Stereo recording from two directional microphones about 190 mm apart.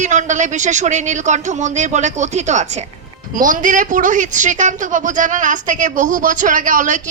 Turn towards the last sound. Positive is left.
turn(degrees=-40)  # may be behind; listen again after turning